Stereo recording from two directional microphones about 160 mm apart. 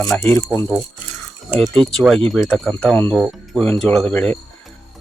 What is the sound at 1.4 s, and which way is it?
A man's voice, 10° right (ahead or behind).